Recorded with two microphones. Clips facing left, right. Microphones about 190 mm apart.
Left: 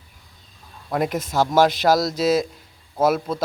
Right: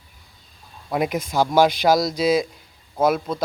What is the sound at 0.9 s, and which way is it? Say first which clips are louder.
Speech: even; centre (ahead or behind).